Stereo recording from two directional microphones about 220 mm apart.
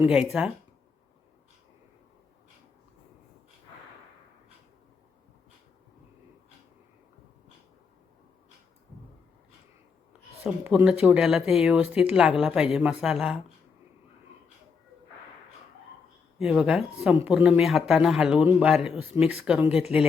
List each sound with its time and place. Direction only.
0.0 s speech: 5° right (ahead or behind)
10.1 s speech: 5° right (ahead or behind)
16.4 s speech: 5° right (ahead or behind)